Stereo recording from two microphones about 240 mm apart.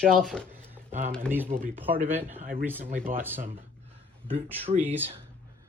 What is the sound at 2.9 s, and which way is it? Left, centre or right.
Speech, right.